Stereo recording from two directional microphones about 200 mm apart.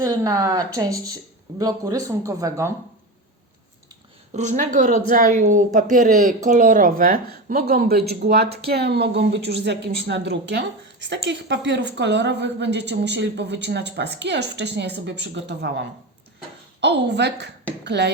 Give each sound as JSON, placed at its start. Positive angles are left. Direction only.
{"t": 0.0, "sound": "speech", "side_deg": -15}
{"t": 4.4, "sound": "a woman's voice", "side_deg": -35}
{"t": 16.8, "sound": "a woman's voice", "side_deg": -60}